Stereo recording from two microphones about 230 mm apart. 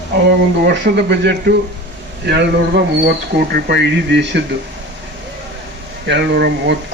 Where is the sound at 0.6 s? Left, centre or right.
Right.